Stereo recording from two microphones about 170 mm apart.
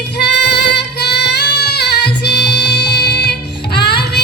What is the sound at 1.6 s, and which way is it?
Music, 75° left (ahead or behind).